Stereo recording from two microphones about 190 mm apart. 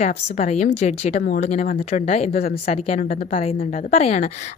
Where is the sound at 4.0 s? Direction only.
35° left (ahead or behind).